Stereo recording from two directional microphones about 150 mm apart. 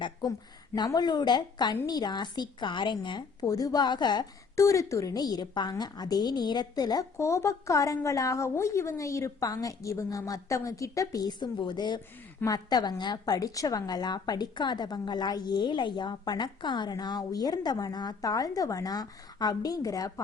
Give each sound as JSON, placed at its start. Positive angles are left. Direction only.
{"t": 0.0, "sound": "a woman's voice", "side_deg": 30}